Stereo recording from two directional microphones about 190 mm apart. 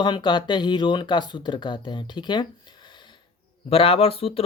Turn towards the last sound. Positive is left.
turn(degrees=30)  # may be behind; listen again after turning